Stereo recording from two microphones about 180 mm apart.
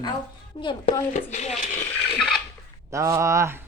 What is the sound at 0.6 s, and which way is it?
Speech, 25° left (ahead or behind).